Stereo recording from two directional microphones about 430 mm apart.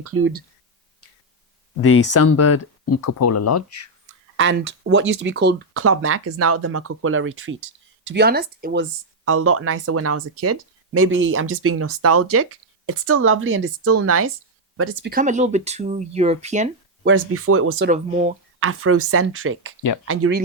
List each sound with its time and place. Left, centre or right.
0.0 s speech: right
1.8 s speech: left
4.4 s speech: right
17.2 s speech: right; by 18.3 s centre
18.6 s speech: right